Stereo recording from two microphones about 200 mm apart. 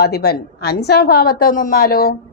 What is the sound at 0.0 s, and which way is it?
A woman's voice, 55° left (ahead or behind).